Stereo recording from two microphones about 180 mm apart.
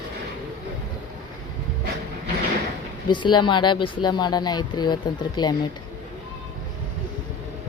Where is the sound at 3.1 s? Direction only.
25° left (ahead or behind).